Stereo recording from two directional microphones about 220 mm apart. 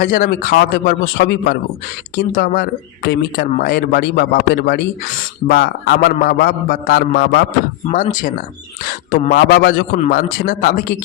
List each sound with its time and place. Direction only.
0.0 s a man's voice: 40° left (ahead or behind)
7.9 s a man's voice: 35° left (ahead or behind)